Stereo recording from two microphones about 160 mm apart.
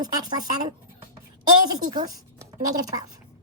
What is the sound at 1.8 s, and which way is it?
Speech, 25° right (ahead or behind).